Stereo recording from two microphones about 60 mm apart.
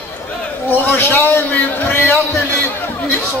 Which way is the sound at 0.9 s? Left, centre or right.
Left.